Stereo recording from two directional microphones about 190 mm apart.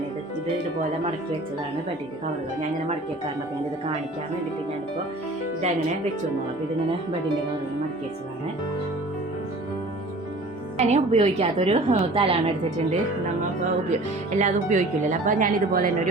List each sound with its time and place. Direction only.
10.8 s a woman's voice: 35° right (ahead or behind)
14.3 s speech: 40° right (ahead or behind)